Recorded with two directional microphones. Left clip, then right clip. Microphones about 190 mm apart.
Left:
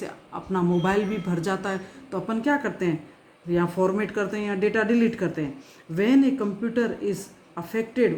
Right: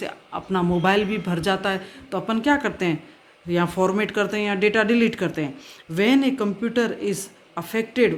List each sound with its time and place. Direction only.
0.0 s speech: 25° right (ahead or behind)